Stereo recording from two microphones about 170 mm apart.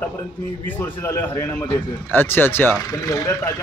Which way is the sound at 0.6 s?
10° left (ahead or behind).